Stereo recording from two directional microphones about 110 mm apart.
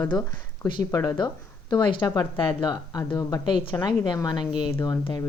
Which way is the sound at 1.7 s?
45° left (ahead or behind).